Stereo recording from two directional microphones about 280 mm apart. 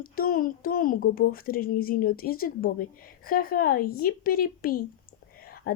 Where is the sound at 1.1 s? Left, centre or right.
Left.